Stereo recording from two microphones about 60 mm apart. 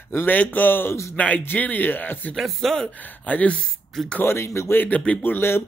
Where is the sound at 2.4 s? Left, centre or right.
Centre.